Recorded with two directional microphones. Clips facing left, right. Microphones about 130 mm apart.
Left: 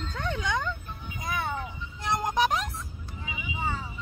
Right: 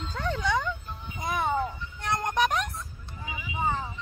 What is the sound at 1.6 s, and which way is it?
Vehicle, 5° left (ahead or behind).